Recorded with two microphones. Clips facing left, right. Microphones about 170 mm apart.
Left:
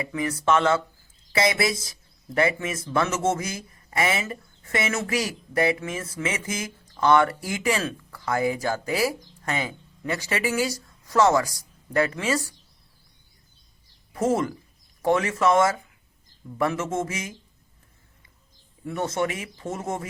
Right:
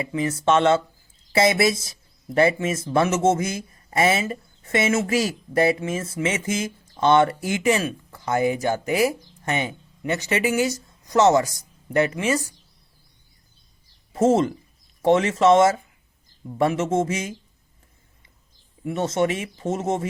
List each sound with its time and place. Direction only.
0.0 s speech: 25° right (ahead or behind)
14.1 s speech: 25° right (ahead or behind)
18.9 s speech: 25° right (ahead or behind)